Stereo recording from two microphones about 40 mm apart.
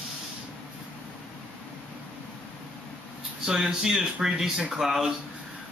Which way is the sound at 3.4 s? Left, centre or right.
Centre.